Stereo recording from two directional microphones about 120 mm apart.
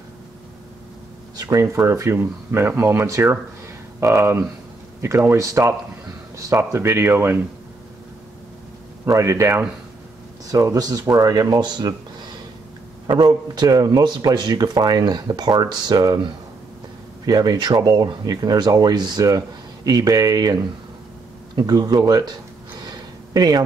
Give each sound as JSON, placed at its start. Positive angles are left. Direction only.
{"t": 1.3, "sound": "speech", "side_deg": -30}
{"t": 9.0, "sound": "speech", "side_deg": -25}
{"t": 13.0, "sound": "speech", "side_deg": -35}
{"t": 17.3, "sound": "speech", "side_deg": -35}
{"t": 22.8, "sound": "a sound", "side_deg": -35}